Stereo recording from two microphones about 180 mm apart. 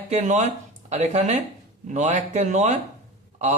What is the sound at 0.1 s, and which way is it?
A man's voice, 40° right (ahead or behind).